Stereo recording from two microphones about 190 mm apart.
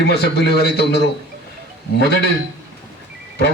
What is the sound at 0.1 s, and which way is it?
A man's voice, 60° left (ahead or behind).